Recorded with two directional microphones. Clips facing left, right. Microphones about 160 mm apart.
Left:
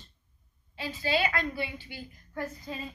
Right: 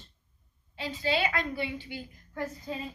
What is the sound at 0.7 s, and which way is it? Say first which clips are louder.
A woman's voice: even; 20° right (ahead or behind).